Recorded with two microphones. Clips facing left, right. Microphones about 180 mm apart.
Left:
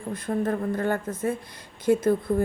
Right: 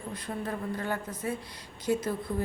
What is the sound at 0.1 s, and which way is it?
A man's voice, 50° left (ahead or behind).